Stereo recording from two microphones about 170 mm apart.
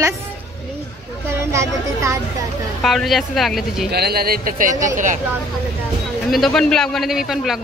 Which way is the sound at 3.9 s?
65° right (ahead or behind).